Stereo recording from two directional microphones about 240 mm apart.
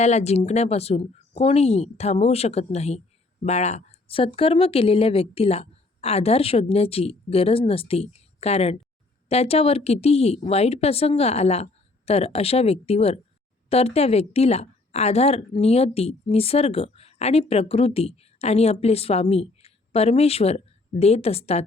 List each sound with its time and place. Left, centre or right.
0.0 s a woman's voice: left